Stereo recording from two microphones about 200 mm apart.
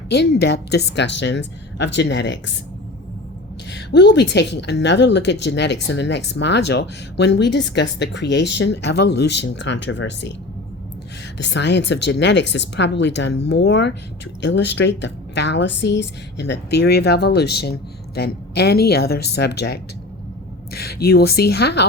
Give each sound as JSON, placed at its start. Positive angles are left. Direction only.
{"t": 0.1, "sound": "a woman's voice", "side_deg": 55}
{"t": 3.7, "sound": "a woman's voice", "side_deg": 60}
{"t": 11.3, "sound": "a woman's voice", "side_deg": 60}